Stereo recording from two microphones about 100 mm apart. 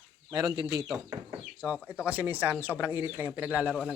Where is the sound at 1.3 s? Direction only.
20° right (ahead or behind).